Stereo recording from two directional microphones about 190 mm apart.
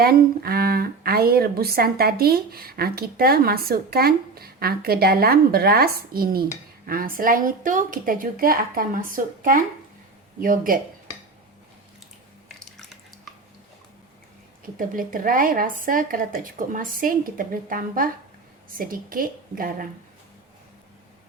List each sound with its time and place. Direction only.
0.0 s speech: 55° right (ahead or behind)
12.5 s a sound: centre (ahead or behind)
14.8 s speech: 45° right (ahead or behind)